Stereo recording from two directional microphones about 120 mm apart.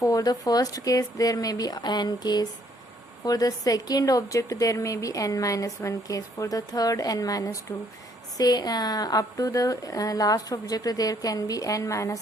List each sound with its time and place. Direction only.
0.0 s a woman's voice: 30° left (ahead or behind)